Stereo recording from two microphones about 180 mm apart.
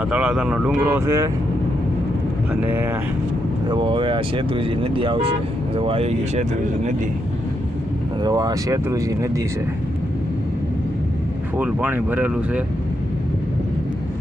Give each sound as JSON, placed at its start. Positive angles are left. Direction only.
{"t": 0.0, "sound": "speech", "side_deg": -5}
{"t": 2.6, "sound": "speech", "side_deg": -10}
{"t": 3.7, "sound": "speech", "side_deg": -25}
{"t": 8.2, "sound": "speech", "side_deg": -20}
{"t": 11.5, "sound": "speech", "side_deg": -10}